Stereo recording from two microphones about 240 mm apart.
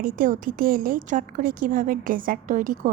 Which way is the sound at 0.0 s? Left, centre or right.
Right.